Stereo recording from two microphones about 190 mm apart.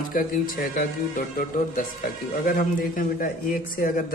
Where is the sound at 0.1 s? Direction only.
50° left (ahead or behind).